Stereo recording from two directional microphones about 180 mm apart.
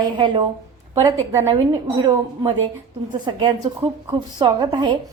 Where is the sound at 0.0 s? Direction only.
25° right (ahead or behind).